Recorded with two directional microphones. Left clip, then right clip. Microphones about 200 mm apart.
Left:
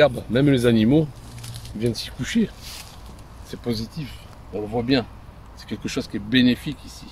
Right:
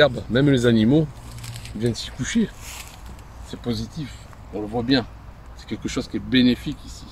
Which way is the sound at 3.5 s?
20° left (ahead or behind).